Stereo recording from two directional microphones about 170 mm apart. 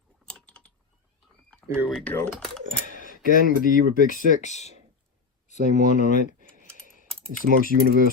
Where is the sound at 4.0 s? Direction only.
55° right (ahead or behind).